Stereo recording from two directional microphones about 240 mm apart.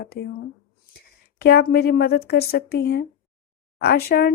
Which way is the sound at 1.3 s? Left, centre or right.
Left.